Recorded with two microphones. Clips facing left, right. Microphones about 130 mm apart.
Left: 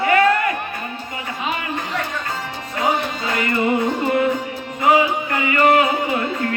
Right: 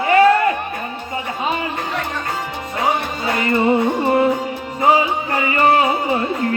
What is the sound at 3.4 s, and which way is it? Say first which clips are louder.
Music: right 3 dB; 30° right (ahead or behind).